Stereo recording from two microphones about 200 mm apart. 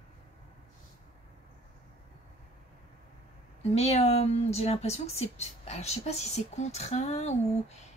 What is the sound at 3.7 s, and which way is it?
Speech, 30° left (ahead or behind).